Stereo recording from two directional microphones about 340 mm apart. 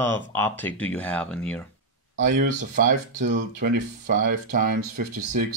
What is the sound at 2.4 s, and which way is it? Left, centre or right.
Speech, right.